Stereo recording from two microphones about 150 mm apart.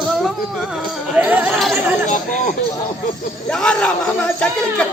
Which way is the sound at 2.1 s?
55° left (ahead or behind).